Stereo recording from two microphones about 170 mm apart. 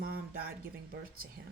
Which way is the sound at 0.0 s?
60° right (ahead or behind).